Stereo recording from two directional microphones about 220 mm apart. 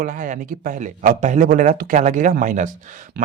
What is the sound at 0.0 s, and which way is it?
Speech, 35° right (ahead or behind).